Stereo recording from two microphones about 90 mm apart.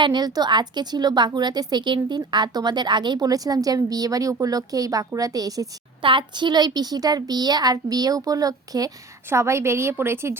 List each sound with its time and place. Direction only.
0.0 s a woman's voice: 50° right (ahead or behind)
6.0 s a woman's voice: 65° right (ahead or behind); by 8.9 s 45° right (ahead or behind)
9.3 s a woman's voice: 30° right (ahead or behind)